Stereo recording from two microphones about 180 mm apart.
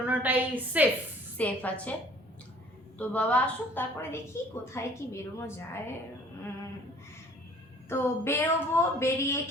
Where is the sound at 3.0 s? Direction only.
5° left (ahead or behind).